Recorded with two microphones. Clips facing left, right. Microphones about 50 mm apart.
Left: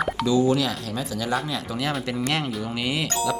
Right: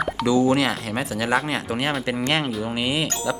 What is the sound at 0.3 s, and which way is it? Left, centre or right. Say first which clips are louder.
Speech: right 3 dB; right.